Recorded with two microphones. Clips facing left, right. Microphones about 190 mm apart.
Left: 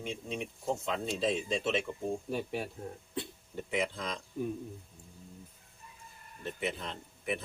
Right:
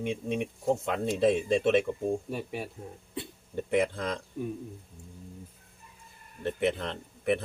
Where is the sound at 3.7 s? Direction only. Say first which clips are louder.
Right 7 dB; 55° right (ahead or behind).